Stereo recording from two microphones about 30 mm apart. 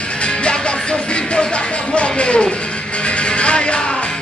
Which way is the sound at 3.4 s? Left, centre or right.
Left.